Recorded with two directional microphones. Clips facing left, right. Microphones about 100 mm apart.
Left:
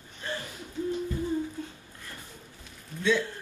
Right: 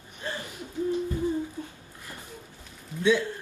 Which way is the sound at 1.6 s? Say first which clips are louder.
Even; 25° right (ahead or behind).